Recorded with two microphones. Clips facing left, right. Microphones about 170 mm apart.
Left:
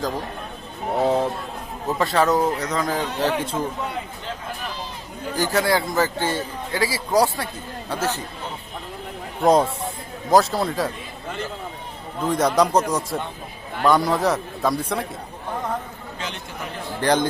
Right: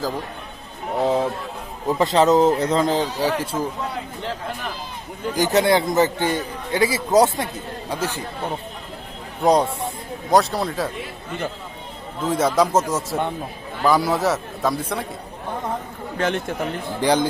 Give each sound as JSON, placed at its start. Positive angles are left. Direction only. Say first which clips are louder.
{"t": 0.9, "sound": "a man's voice", "louder": "even", "side_deg": 0}
{"t": 1.9, "sound": "a man's voice", "louder": "right 3 dB", "side_deg": -20}
{"t": 3.2, "sound": "speech", "louder": "even", "side_deg": -10}
{"t": 5.3, "sound": "a man's voice", "louder": "right 3 dB", "side_deg": -20}
{"t": 9.4, "sound": "a man's voice", "louder": "even", "side_deg": 0}
{"t": 12.3, "sound": "a man's voice", "louder": "even", "side_deg": 0}
{"t": 16.1, "sound": "a man's voice", "louder": "right 11 dB", "side_deg": -55}
{"t": 17.0, "sound": "speech", "louder": "right 1 dB", "side_deg": -10}